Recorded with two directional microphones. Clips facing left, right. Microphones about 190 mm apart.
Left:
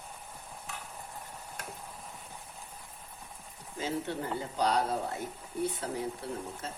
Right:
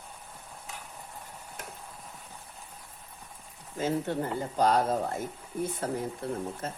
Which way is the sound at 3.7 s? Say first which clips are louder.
Right 5 dB; 50° right (ahead or behind).